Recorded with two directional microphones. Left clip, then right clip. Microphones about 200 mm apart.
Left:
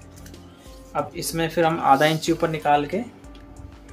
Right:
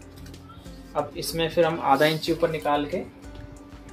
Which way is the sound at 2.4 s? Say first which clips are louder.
Left 4 dB; 35° left (ahead or behind).